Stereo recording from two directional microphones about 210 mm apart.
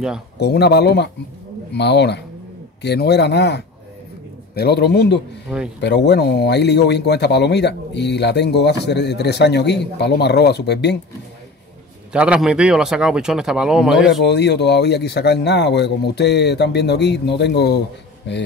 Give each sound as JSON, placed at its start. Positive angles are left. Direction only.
{"t": 0.4, "sound": "speech", "side_deg": 50}
{"t": 12.1, "sound": "speech", "side_deg": -5}
{"t": 14.2, "sound": "speech", "side_deg": 55}